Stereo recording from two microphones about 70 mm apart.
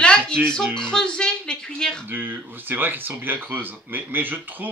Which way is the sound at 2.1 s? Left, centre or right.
Right.